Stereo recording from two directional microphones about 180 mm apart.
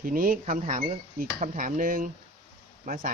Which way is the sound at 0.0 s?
50° right (ahead or behind).